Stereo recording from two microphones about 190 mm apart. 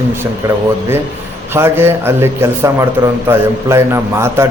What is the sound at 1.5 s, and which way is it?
A man's voice, 10° right (ahead or behind).